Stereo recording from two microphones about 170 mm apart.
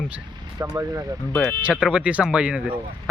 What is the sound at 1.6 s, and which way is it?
Speech, 5° right (ahead or behind).